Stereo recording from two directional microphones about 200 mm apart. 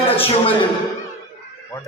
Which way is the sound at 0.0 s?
30° left (ahead or behind).